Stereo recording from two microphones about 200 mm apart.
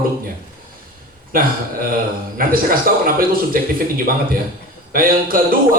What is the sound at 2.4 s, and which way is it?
A man's voice, 45° right (ahead or behind).